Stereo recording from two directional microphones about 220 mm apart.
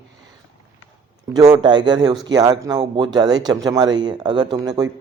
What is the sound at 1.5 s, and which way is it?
A man's voice, 20° right (ahead or behind).